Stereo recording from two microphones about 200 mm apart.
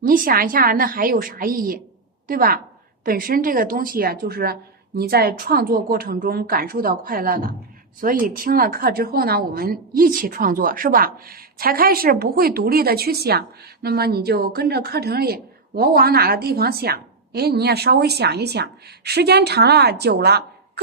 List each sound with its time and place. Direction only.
0.0 s speech: 45° right (ahead or behind)